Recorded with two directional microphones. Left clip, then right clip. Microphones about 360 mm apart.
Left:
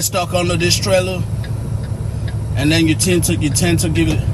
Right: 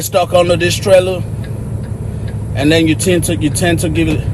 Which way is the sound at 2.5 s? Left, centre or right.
Centre.